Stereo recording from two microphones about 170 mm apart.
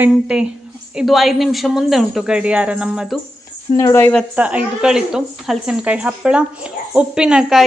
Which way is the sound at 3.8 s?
15° left (ahead or behind).